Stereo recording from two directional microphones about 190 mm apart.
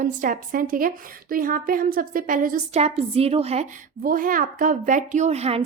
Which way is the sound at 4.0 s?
45° right (ahead or behind).